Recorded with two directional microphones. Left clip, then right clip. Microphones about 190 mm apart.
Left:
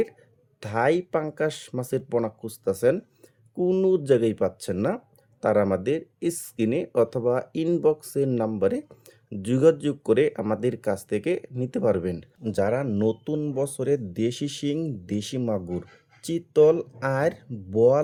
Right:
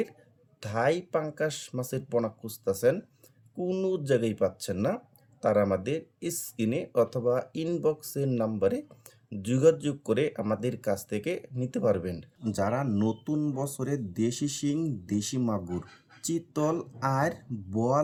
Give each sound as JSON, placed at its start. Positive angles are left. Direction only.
{"t": 0.6, "sound": "speech", "side_deg": 45}